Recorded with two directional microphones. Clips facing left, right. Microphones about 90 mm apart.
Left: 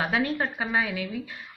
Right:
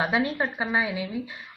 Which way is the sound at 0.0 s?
20° right (ahead or behind).